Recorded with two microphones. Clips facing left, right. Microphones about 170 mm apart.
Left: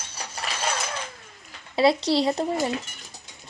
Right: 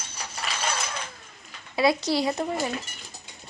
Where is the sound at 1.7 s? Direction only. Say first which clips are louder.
Left 3 dB; 30° left (ahead or behind).